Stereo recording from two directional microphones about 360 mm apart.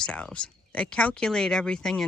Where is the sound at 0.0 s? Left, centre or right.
Centre.